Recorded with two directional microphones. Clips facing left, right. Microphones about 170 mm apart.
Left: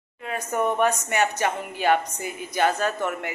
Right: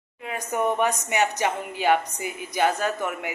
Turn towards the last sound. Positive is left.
turn(degrees=-10)  # may be behind; listen again after turning